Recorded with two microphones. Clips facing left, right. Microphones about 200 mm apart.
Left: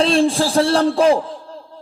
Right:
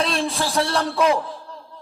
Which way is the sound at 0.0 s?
30° left (ahead or behind).